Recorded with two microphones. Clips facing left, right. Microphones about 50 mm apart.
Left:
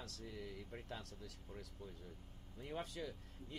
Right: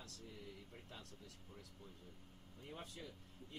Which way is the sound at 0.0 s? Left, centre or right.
Left.